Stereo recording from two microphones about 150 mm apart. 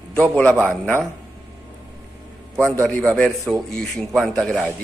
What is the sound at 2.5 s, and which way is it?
A man's voice, 10° left (ahead or behind).